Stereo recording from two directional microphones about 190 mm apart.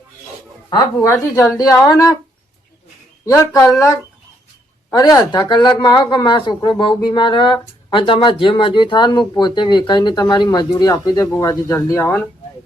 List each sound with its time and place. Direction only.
0.7 s a woman's voice: 15° left (ahead or behind)
3.2 s a woman's voice: 15° left (ahead or behind)